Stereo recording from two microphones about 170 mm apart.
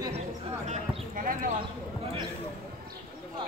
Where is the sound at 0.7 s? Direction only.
55° right (ahead or behind).